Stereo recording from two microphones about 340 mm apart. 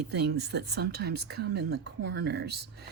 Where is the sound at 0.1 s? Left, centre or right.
Right.